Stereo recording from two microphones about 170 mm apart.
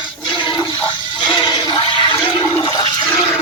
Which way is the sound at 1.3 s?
25° left (ahead or behind).